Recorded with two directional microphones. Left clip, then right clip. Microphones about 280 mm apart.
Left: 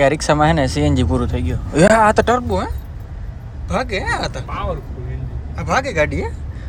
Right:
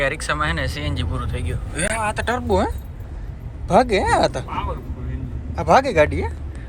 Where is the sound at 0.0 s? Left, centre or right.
Centre.